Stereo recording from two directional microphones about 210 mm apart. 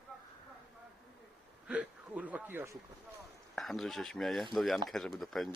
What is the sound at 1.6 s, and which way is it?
Speech, 5° right (ahead or behind).